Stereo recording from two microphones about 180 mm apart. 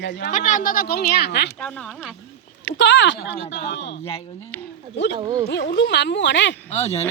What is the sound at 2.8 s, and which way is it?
Speech, 90° left.